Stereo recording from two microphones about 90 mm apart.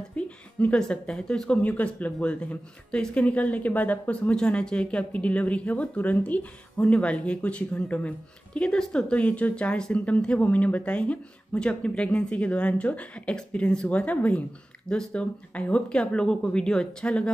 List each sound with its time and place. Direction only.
0.1 s a woman's voice: 15° left (ahead or behind)
1.6 s speech: 15° left (ahead or behind)